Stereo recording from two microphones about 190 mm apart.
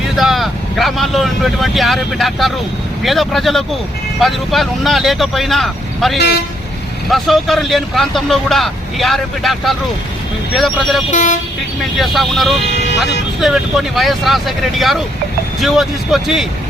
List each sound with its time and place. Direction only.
0.2 s speech: centre (ahead or behind)
6.1 s speech: 65° left (ahead or behind)
7.1 s speech: centre (ahead or behind)
11.1 s speech: 40° left (ahead or behind)
11.9 s speech: centre (ahead or behind)